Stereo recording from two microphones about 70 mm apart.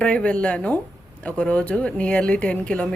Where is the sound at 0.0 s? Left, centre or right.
Centre.